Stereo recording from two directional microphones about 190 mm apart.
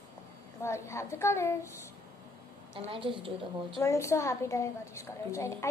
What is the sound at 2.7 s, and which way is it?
Speech, 25° right (ahead or behind).